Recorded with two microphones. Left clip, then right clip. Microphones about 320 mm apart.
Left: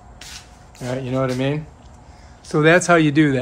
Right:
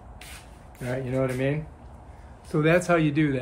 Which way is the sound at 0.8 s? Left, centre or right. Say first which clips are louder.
Left 5 dB; centre.